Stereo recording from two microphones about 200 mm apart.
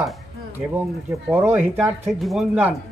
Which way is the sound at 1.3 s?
10° right (ahead or behind).